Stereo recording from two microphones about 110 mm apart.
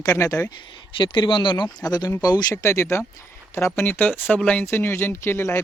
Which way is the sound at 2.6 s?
25° left (ahead or behind).